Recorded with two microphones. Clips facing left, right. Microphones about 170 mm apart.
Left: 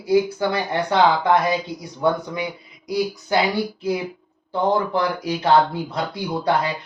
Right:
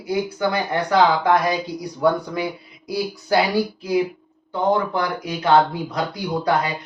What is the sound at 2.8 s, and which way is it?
Speech, 20° left (ahead or behind).